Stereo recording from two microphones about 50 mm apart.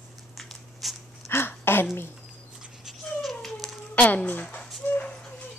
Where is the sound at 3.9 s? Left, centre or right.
Left.